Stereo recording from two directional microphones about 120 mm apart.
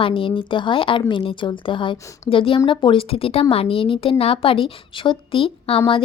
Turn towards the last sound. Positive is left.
turn(degrees=50)  # may be behind; listen again after turning